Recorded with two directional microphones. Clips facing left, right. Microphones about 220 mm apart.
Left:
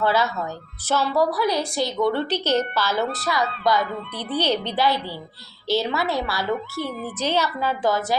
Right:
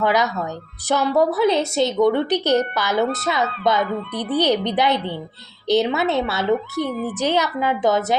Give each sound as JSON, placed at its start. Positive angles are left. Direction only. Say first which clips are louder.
{"t": 0.0, "sound": "a woman's voice", "louder": "right 2 dB", "side_deg": -15}